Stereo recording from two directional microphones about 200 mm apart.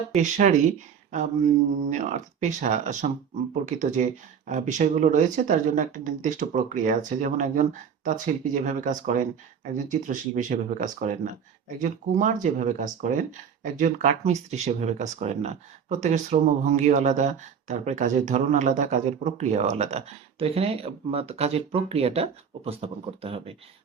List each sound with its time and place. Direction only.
0.2 s speech: 40° right (ahead or behind)